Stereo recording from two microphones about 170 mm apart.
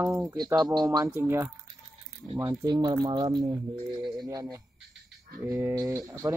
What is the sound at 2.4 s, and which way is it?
Speech, 25° right (ahead or behind).